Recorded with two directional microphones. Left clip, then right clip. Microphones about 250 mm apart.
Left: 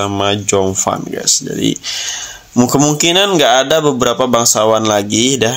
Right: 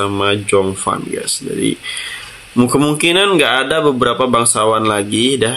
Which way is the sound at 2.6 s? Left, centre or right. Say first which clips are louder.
Left 1 dB; left.